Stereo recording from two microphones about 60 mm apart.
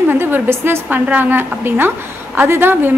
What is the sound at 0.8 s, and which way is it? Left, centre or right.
A woman's voice, right.